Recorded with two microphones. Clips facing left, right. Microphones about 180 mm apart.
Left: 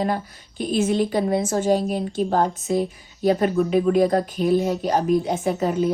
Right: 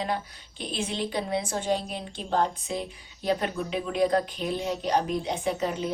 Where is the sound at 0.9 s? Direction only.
45° left (ahead or behind).